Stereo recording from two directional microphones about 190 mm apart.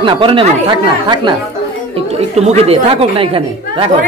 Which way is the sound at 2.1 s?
35° right (ahead or behind).